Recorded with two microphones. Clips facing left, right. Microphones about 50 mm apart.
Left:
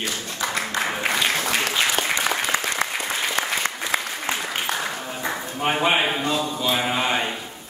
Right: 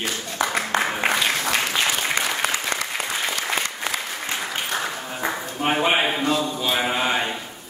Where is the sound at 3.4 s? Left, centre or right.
Left.